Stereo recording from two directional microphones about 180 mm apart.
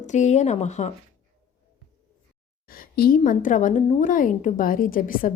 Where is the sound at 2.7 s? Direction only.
55° left (ahead or behind).